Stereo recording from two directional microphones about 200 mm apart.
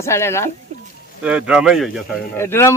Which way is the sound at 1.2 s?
5° right (ahead or behind).